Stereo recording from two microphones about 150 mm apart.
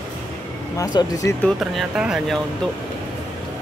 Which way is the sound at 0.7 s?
25° left (ahead or behind).